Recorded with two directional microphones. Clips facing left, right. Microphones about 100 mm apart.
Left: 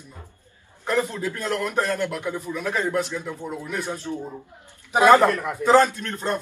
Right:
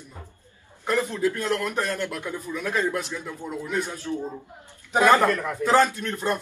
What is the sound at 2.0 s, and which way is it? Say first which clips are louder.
Speech: left 3 dB; 15° left (ahead or behind).